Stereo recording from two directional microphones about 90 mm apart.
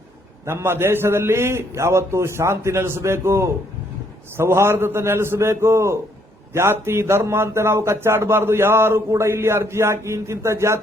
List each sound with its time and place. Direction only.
0.4 s a man's voice: 25° right (ahead or behind)